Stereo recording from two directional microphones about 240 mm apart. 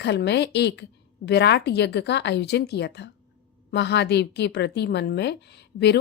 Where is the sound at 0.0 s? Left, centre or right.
Left.